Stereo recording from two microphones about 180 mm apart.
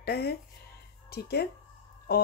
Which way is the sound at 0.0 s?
60° left (ahead or behind).